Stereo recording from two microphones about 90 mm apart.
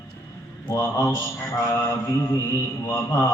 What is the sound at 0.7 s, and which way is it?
Mantra, 35° left (ahead or behind).